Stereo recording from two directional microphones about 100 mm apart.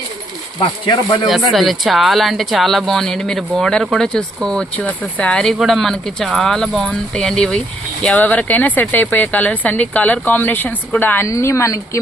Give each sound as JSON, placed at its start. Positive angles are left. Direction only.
{"t": 0.6, "sound": "speech", "side_deg": 45}
{"t": 1.3, "sound": "speech", "side_deg": 0}
{"t": 11.3, "sound": "speech", "side_deg": 30}